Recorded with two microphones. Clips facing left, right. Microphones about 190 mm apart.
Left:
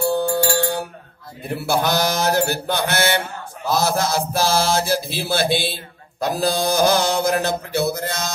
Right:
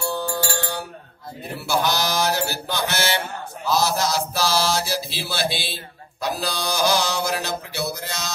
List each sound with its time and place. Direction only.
0.0 s music: 50° left (ahead or behind)
1.7 s mantra: 55° left (ahead or behind)